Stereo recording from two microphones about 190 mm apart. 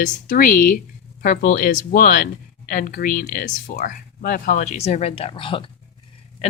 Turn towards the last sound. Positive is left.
turn(degrees=25)  # may be behind; listen again after turning